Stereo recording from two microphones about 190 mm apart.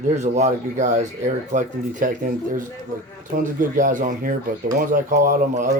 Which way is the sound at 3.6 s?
45° right (ahead or behind).